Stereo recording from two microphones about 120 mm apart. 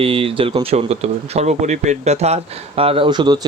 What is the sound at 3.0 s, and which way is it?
Speech, 35° right (ahead or behind).